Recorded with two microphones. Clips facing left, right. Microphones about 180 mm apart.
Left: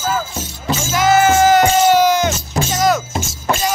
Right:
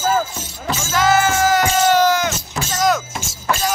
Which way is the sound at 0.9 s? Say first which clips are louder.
Left 4 dB; 20° left (ahead or behind).